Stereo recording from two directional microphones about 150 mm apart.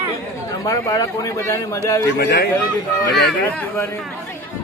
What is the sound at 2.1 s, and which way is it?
Speech, 90° left.